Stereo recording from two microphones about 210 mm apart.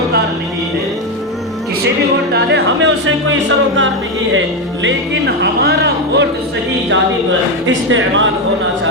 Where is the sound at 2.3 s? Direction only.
55° right (ahead or behind).